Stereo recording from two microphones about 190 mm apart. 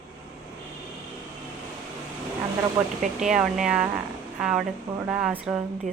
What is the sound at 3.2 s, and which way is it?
Speech, centre (ahead or behind).